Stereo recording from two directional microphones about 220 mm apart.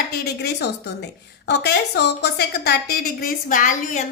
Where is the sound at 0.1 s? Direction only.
45° left (ahead or behind).